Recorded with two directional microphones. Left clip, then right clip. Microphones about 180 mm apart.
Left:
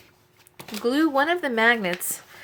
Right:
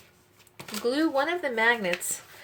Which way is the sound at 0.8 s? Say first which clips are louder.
Left 4 dB; 30° left (ahead or behind).